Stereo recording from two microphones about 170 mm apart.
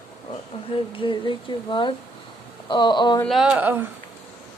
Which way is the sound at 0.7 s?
30° left (ahead or behind).